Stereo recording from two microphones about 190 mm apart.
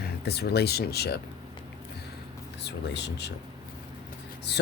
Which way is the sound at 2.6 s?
65° left (ahead or behind).